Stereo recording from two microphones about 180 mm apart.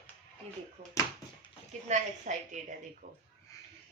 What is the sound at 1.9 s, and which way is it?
Speech, 40° right (ahead or behind).